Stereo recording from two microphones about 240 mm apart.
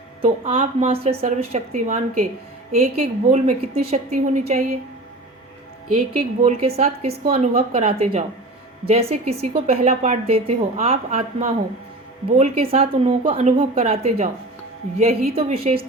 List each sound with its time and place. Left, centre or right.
0.2 s a woman's voice: right
6.1 s a woman's voice: right